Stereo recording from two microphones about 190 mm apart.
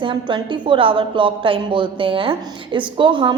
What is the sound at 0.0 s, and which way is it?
A woman's voice, 25° right (ahead or behind).